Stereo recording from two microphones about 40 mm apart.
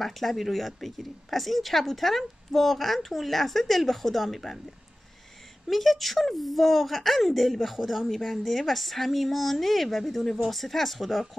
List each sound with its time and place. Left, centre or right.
0.0 s a woman's voice: centre
5.7 s a woman's voice: centre